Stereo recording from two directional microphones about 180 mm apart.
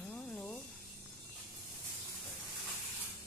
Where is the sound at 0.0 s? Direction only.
5° left (ahead or behind).